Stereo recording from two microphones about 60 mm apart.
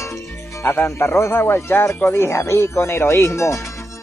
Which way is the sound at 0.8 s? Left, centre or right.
Left.